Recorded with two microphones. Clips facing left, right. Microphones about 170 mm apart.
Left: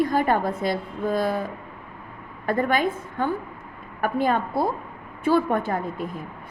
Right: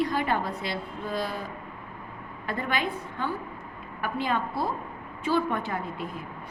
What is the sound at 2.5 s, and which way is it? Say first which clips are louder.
A woman's voice: left 7 dB; 50° left (ahead or behind).